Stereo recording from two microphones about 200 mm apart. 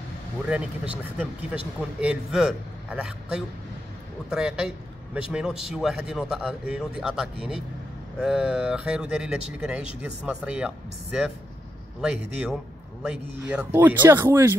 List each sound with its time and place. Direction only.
0.5 s a man's voice: 5° right (ahead or behind)